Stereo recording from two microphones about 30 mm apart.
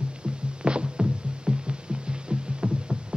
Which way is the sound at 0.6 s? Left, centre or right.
Right.